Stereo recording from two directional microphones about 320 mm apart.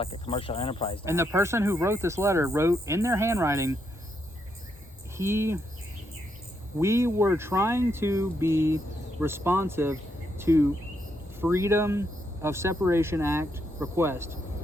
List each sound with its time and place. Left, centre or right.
0.0 s speech: centre
1.0 s speech: centre
5.1 s speech: centre
6.7 s speech: centre